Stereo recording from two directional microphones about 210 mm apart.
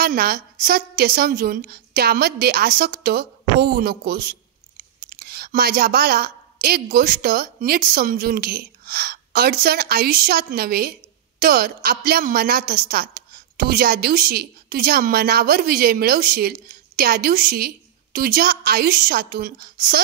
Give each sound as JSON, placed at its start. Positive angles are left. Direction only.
{"t": 0.0, "sound": "a woman's voice", "side_deg": -45}